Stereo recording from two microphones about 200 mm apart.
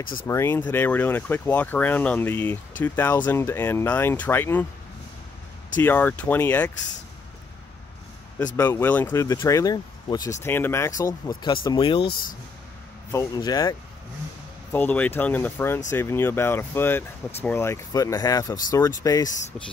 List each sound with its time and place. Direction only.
0.3 s speech: 10° left (ahead or behind)
5.8 s speech: 10° left (ahead or behind)
8.5 s speech: 10° left (ahead or behind)
13.1 s speech: 15° left (ahead or behind)
14.7 s speech: 10° left (ahead or behind)